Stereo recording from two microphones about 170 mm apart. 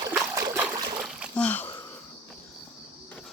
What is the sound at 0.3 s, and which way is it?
Trickle, 15° right (ahead or behind).